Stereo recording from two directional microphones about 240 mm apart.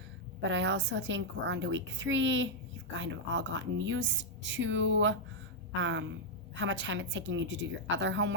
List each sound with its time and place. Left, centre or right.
0.4 s a woman's voice: right